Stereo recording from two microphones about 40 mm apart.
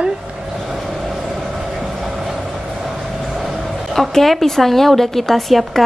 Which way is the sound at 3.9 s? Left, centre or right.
Centre.